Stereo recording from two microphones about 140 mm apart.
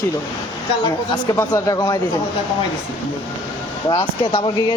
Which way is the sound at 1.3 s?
25° left (ahead or behind).